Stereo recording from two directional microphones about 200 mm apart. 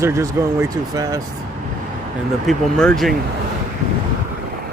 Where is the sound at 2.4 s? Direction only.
Centre (ahead or behind).